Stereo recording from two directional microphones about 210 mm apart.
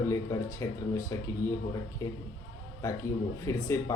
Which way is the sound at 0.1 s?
15° left (ahead or behind).